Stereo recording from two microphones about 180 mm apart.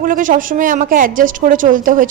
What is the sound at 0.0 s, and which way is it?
A woman's voice, 50° right (ahead or behind).